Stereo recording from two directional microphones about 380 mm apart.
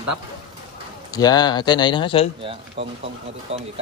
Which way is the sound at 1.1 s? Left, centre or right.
Centre.